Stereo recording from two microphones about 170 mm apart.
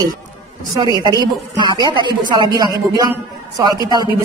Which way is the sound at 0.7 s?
25° right (ahead or behind).